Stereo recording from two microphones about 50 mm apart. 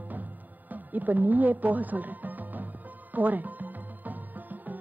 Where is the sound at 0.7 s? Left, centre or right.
Right.